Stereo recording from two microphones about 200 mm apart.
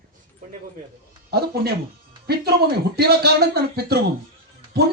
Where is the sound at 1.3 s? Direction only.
50° right (ahead or behind).